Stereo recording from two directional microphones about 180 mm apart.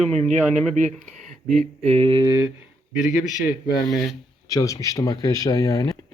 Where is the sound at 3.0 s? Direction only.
45° left (ahead or behind).